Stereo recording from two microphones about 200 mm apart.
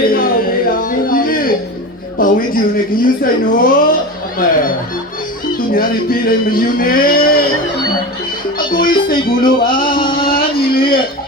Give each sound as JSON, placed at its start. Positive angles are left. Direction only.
{"t": 0.0, "sound": "a sound", "side_deg": 45}
{"t": 2.1, "sound": "speech", "side_deg": 45}
{"t": 5.7, "sound": "speech", "side_deg": 45}
{"t": 8.5, "sound": "speech", "side_deg": 45}
{"t": 9.6, "sound": "music", "side_deg": 45}
{"t": 10.7, "sound": "a sound", "side_deg": 50}